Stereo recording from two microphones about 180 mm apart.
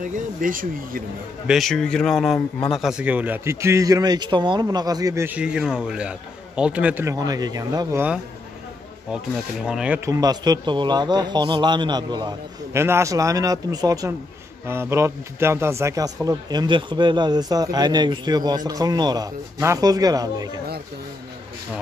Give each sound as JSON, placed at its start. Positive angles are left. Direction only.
{"t": 0.0, "sound": "speech", "side_deg": -50}
{"t": 1.5, "sound": "a man's voice", "side_deg": 0}
{"t": 9.7, "sound": "a man's voice", "side_deg": -5}